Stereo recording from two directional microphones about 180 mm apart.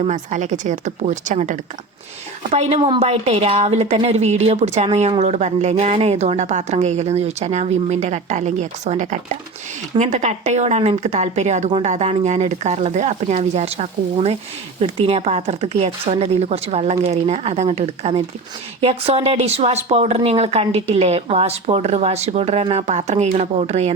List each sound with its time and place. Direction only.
0.0 s a woman's voice: 40° right (ahead or behind)